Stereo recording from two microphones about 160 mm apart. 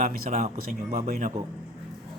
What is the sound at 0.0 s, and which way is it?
A man's voice, 50° right (ahead or behind).